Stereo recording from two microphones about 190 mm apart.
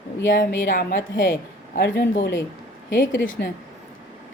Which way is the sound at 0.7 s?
50° left (ahead or behind).